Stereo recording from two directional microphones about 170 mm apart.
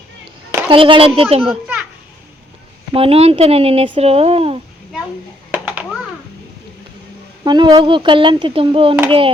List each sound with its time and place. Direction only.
0.7 s speech: 30° right (ahead or behind)
2.9 s speech: 35° right (ahead or behind)
5.5 s a sound: 10° right (ahead or behind)
7.4 s speech: 25° right (ahead or behind)